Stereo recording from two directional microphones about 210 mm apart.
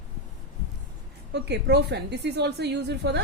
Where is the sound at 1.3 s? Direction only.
55° right (ahead or behind).